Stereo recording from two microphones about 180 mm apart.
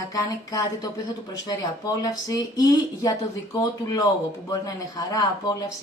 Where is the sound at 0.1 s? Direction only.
20° left (ahead or behind).